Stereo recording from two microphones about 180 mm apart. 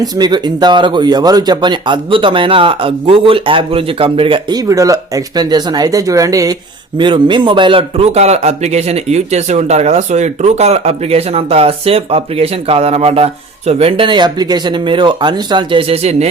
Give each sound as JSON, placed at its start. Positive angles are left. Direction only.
{"t": 0.0, "sound": "speech", "side_deg": -25}